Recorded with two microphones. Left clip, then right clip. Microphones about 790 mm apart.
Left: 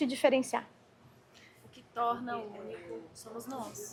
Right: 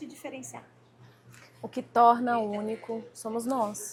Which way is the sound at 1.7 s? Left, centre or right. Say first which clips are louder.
Right 12 dB; right.